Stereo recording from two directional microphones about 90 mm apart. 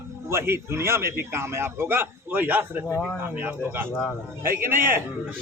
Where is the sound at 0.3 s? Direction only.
30° right (ahead or behind).